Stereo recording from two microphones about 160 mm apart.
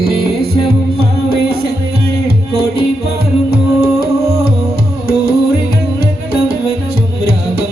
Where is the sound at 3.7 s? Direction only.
20° right (ahead or behind).